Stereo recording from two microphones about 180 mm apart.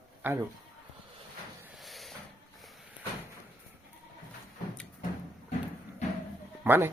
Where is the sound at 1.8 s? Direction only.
Centre (ahead or behind).